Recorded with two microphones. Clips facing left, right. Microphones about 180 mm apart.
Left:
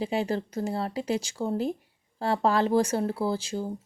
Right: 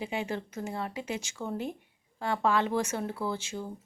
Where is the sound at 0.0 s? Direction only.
35° left (ahead or behind).